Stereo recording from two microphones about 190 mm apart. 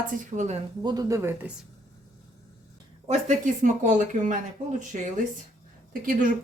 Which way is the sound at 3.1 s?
40° right (ahead or behind).